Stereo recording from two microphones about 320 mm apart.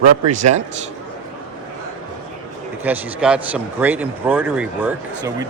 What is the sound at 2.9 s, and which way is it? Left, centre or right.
Speech, centre.